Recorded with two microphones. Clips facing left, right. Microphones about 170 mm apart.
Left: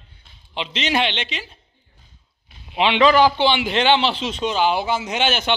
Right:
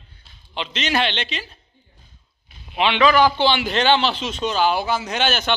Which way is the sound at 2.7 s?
25° left (ahead or behind).